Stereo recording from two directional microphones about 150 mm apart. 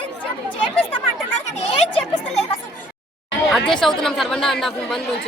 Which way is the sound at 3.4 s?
Centre (ahead or behind).